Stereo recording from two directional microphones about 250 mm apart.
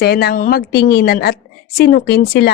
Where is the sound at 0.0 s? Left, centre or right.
Left.